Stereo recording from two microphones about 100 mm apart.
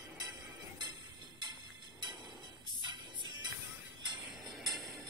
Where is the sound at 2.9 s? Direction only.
50° right (ahead or behind).